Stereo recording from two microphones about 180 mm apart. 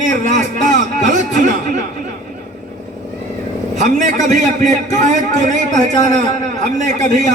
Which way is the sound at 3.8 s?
45° right (ahead or behind).